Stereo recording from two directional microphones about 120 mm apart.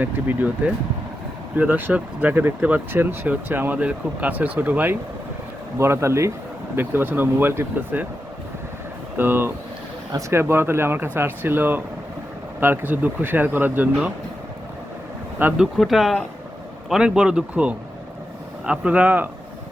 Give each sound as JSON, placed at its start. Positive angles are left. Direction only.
{"t": 0.0, "sound": "speech", "side_deg": -15}
{"t": 9.1, "sound": "speech", "side_deg": -15}
{"t": 15.4, "sound": "speech", "side_deg": -10}